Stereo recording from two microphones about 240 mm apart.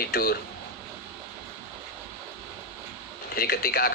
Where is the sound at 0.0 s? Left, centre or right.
Left.